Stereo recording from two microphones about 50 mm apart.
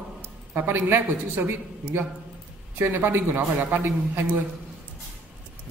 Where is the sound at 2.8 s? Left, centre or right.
Right.